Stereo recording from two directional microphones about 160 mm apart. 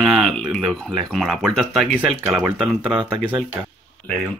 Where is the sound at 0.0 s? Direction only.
Centre (ahead or behind).